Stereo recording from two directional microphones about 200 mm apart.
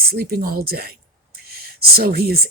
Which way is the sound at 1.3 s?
50° right (ahead or behind).